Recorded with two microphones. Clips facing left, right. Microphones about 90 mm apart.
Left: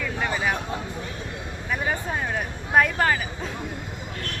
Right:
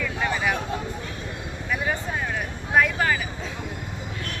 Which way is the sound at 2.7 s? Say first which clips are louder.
Left 1 dB; 45° left (ahead or behind).